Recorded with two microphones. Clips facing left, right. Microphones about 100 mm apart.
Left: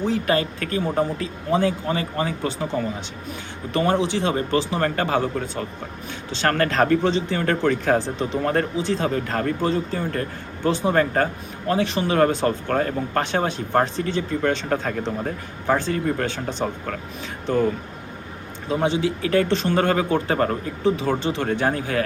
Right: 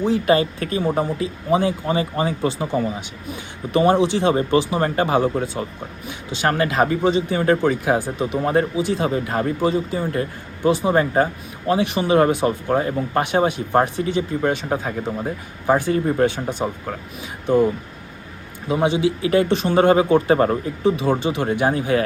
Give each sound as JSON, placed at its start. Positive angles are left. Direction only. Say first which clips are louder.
{"t": 0.0, "sound": "speech", "louder": "right 4 dB", "side_deg": -20}
{"t": 18.7, "sound": "speech", "louder": "right 3 dB", "side_deg": -15}